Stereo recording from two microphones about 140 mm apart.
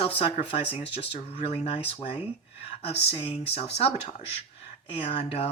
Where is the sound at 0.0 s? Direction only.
45° left (ahead or behind).